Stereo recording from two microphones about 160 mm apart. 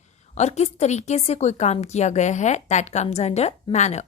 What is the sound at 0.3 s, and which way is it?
A woman's voice, 45° left (ahead or behind).